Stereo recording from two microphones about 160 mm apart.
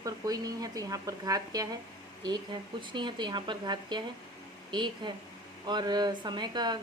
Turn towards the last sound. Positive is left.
turn(degrees=-25)  # may be behind; listen again after turning